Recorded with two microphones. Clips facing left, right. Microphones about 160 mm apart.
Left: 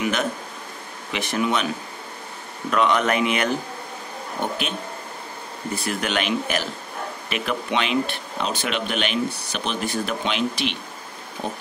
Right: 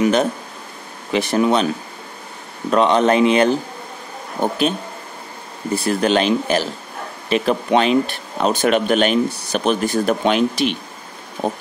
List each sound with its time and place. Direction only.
0.0 s a sound: 35° right (ahead or behind)
1.1 s speech: 35° right (ahead or behind)
2.7 s speech: 30° right (ahead or behind)
5.9 s speech: 35° right (ahead or behind)